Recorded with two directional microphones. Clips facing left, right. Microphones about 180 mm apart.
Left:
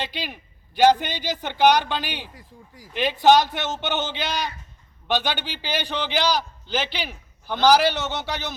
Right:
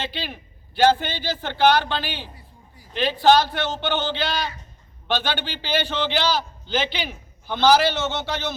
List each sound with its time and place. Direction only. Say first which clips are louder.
0.0 s a man's voice: even; 15° left (ahead or behind)
2.3 s speech: left 3 dB; 90° left
2.9 s a man's voice: even; 15° left (ahead or behind)